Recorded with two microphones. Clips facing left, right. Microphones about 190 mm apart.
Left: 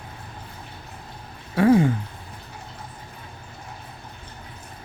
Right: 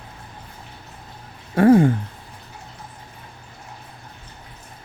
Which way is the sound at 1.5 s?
50° right (ahead or behind).